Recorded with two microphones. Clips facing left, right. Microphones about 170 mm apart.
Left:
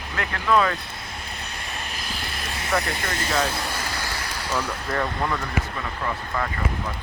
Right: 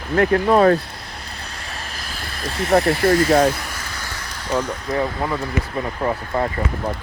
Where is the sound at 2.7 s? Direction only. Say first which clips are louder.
Right 12 dB; 35° right (ahead or behind).